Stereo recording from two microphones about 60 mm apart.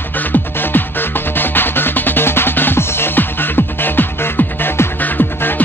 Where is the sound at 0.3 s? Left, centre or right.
Left.